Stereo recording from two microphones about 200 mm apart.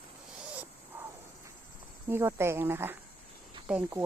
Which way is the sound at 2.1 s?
10° right (ahead or behind).